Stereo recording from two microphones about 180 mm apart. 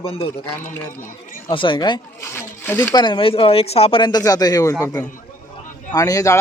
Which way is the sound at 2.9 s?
25° left (ahead or behind).